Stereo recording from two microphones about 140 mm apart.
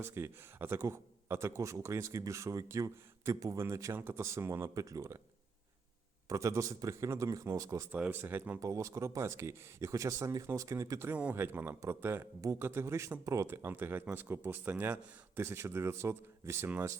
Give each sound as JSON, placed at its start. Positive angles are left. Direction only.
{"t": 0.0, "sound": "speech", "side_deg": -15}
{"t": 6.2, "sound": "speech", "side_deg": -20}
{"t": 7.9, "sound": "speech", "side_deg": -10}